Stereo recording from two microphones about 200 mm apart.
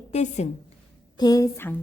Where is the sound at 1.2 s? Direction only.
20° left (ahead or behind).